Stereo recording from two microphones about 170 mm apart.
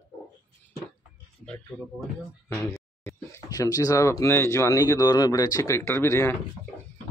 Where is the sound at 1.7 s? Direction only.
5° right (ahead or behind).